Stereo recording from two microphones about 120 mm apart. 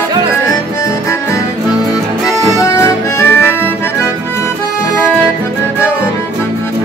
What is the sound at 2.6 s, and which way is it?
Music, 25° left (ahead or behind).